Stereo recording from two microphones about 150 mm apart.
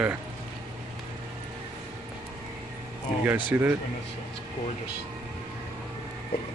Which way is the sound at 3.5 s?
15° right (ahead or behind).